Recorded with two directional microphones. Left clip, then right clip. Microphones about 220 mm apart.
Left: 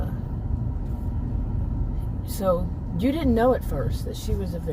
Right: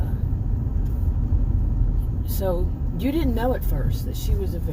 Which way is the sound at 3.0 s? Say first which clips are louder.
Left 3 dB; 15° left (ahead or behind).